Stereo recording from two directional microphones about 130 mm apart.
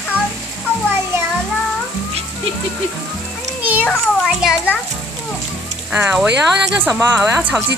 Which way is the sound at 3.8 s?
5° left (ahead or behind).